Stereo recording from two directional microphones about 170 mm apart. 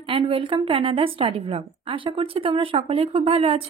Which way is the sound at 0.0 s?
30° right (ahead or behind).